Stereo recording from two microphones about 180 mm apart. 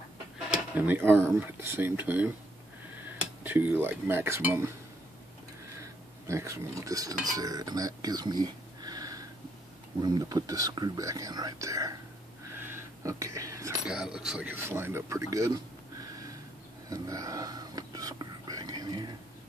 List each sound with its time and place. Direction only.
0.5 s speech: 10° right (ahead or behind)
3.4 s speech: 10° right (ahead or behind)
5.8 s cutlery: 15° right (ahead or behind)
7.3 s speech: 20° right (ahead or behind)
12.5 s a sound: 10° right (ahead or behind)
13.8 s speech: 5° right (ahead or behind); by 16.3 s 20° right (ahead or behind)
16.9 s whispering: 20° right (ahead or behind)